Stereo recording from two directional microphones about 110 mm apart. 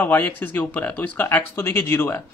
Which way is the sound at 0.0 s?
15° left (ahead or behind).